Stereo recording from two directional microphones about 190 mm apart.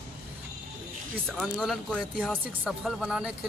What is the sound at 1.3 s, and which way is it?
Speech, centre (ahead or behind).